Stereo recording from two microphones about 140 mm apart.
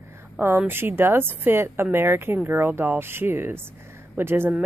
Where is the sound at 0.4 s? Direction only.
15° right (ahead or behind).